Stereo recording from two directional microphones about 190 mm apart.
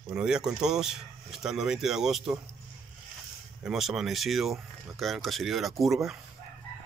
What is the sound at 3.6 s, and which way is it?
Speech, centre (ahead or behind).